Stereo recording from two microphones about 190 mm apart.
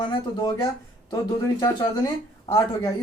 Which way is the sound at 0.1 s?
25° left (ahead or behind).